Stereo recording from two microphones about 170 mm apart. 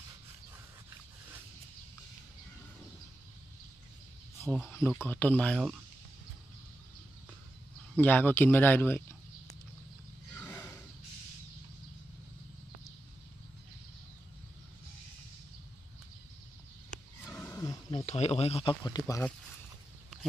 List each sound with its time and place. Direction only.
4.6 s speech: 15° left (ahead or behind)
8.0 s speech: 10° left (ahead or behind)
10.3 s a sound: 15° left (ahead or behind)
17.2 s roaring cats: 10° left (ahead or behind)
17.9 s speech: 40° left (ahead or behind); by 19.2 s 20° left (ahead or behind)